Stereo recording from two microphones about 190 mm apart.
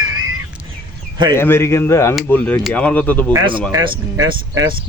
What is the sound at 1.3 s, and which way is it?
Speech, 10° left (ahead or behind).